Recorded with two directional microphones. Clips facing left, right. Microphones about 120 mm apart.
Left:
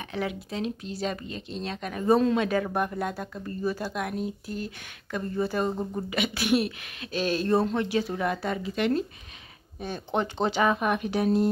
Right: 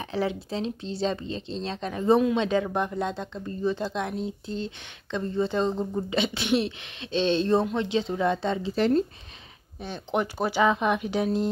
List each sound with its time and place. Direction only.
0.0 s speech: 30° right (ahead or behind)
9.8 s speech: 15° left (ahead or behind)
10.1 s speech: 10° right (ahead or behind)